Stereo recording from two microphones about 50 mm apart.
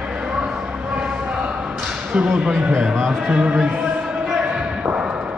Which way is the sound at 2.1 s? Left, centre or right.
Right.